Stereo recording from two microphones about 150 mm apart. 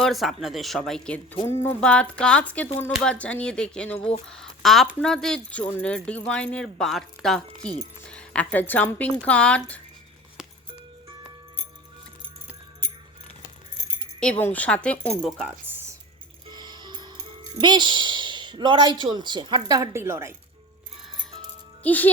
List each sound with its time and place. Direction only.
0.0 s speech: centre (ahead or behind)
14.2 s speech: 10° left (ahead or behind)
16.5 s music: 30° right (ahead or behind)
17.6 s a woman's voice: 30° right (ahead or behind)
21.8 s speech: 10° left (ahead or behind)